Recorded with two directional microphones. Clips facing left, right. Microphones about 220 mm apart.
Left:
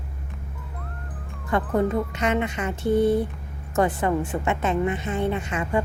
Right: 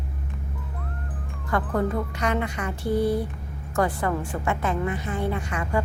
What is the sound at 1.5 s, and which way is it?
A woman's voice, 20° left (ahead or behind).